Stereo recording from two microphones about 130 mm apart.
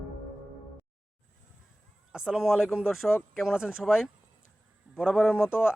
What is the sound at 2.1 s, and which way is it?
Speech, 5° right (ahead or behind).